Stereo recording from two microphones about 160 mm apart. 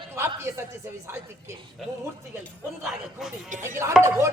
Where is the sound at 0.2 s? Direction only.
15° right (ahead or behind).